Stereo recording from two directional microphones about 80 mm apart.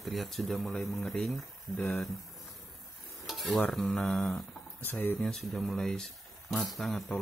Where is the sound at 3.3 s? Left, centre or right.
Centre.